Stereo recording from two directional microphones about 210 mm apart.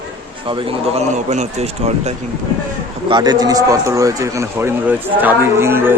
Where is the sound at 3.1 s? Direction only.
20° right (ahead or behind).